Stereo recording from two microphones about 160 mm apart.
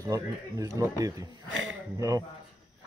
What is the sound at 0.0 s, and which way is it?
Speech, 20° right (ahead or behind).